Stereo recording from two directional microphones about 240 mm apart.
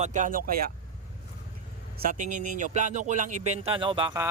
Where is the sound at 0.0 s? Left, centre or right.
Right.